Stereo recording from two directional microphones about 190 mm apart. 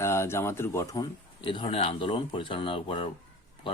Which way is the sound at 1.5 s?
25° left (ahead or behind).